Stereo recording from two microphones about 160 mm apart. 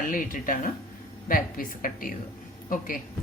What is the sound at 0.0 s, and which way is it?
A woman's voice, 55° left (ahead or behind).